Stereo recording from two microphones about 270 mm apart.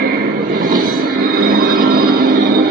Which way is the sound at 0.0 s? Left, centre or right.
Right.